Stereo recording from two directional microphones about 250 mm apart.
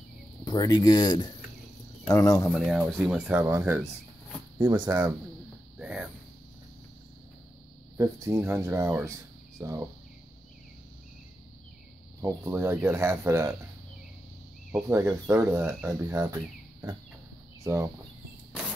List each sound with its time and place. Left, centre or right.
0.5 s speech: centre
2.5 s speech: centre
5.8 s a sound: centre
8.0 s speech: centre
12.2 s speech: centre
14.7 s speech: centre
17.6 s speech: centre